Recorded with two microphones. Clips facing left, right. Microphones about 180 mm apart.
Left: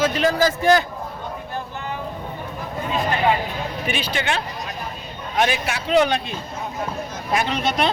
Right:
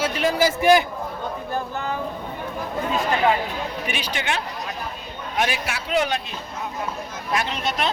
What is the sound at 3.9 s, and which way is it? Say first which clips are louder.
Speech: left 6 dB; 15° right (ahead or behind).